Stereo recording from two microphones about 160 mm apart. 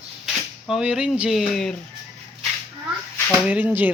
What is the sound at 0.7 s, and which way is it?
Speech, 5° right (ahead or behind).